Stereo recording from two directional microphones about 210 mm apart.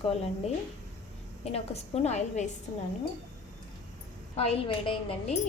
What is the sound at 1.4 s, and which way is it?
A woman's voice, 30° left (ahead or behind).